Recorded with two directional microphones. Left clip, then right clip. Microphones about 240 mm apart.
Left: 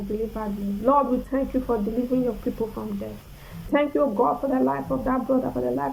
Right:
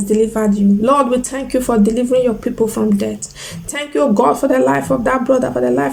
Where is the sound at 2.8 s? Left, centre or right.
Right.